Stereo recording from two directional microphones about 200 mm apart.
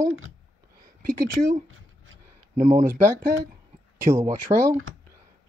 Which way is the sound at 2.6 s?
15° right (ahead or behind).